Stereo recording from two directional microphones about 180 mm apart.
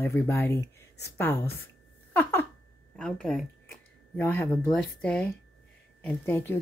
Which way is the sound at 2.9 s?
5° left (ahead or behind).